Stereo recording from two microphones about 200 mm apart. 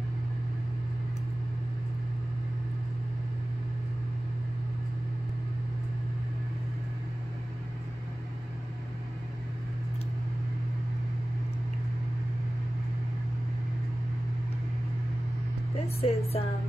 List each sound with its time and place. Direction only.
16.0 s a woman's voice: 30° left (ahead or behind)